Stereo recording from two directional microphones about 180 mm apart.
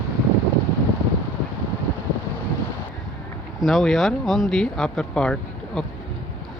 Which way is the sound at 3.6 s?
Centre (ahead or behind).